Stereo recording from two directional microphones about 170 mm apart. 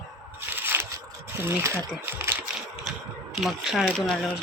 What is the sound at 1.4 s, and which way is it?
Speech, 15° right (ahead or behind).